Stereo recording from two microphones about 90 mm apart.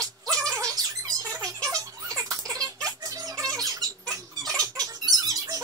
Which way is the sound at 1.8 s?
40° right (ahead or behind).